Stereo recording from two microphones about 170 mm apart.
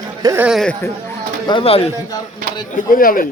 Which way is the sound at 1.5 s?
30° left (ahead or behind).